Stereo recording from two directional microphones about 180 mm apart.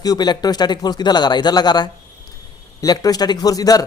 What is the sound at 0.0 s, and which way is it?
Speech, 20° left (ahead or behind).